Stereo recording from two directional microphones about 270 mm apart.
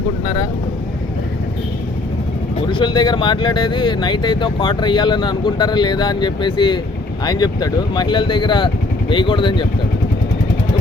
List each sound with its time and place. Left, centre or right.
2.6 s speech: centre